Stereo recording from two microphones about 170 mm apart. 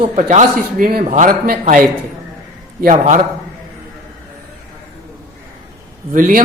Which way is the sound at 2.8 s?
45° right (ahead or behind).